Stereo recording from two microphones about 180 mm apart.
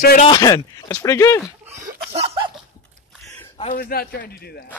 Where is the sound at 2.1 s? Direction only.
35° right (ahead or behind).